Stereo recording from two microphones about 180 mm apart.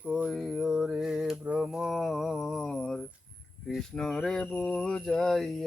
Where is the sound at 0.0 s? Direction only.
5° right (ahead or behind).